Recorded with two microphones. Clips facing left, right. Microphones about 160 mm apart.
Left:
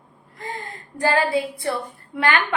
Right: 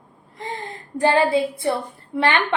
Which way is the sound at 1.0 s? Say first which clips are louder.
Right 3 dB; 25° right (ahead or behind).